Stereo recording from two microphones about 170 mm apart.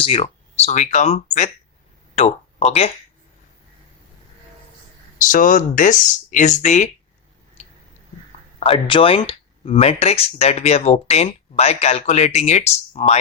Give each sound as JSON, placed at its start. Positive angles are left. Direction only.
{"t": 0.0, "sound": "speech", "side_deg": 30}
{"t": 5.3, "sound": "speech", "side_deg": 50}
{"t": 7.6, "sound": "a sound", "side_deg": 40}
{"t": 8.5, "sound": "speech", "side_deg": 35}